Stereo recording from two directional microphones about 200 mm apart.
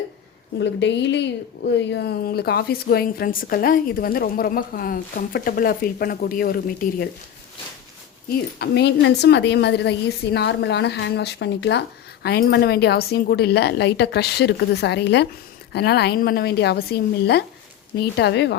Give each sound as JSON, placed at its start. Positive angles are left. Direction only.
{"t": 0.6, "sound": "a woman's voice", "side_deg": 60}
{"t": 8.5, "sound": "a woman's voice", "side_deg": 55}